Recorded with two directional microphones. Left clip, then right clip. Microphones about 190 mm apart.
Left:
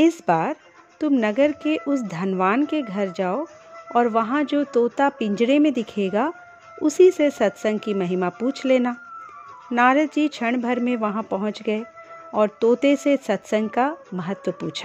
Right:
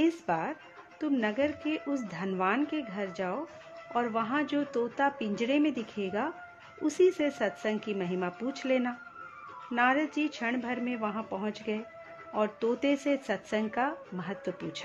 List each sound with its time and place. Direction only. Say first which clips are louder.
0.0 s speech: left 10 dB; 45° left (ahead or behind)